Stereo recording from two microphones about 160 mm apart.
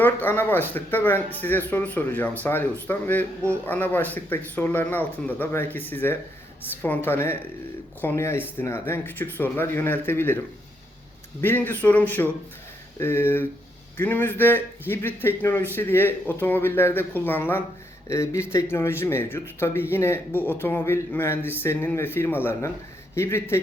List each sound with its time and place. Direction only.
0.0 s speech: 10° left (ahead or behind)